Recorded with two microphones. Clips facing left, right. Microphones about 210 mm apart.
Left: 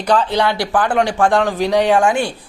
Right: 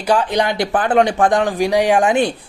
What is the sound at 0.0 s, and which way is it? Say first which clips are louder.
Speech: left 1 dB; 10° right (ahead or behind).